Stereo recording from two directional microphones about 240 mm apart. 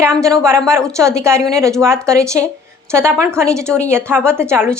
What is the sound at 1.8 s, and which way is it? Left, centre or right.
A woman's voice, centre.